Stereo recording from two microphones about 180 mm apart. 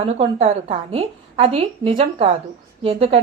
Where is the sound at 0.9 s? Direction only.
35° right (ahead or behind).